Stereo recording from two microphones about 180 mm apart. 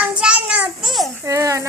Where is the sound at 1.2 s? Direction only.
20° right (ahead or behind).